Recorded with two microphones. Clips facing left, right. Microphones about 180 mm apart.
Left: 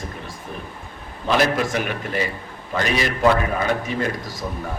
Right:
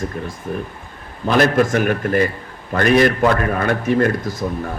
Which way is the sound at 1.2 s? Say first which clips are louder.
Right 5 dB; 50° right (ahead or behind).